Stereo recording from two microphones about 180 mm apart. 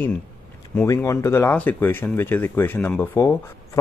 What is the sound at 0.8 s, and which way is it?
Speech, 15° left (ahead or behind).